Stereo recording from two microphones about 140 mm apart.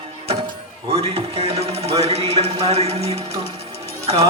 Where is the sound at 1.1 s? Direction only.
45° right (ahead or behind).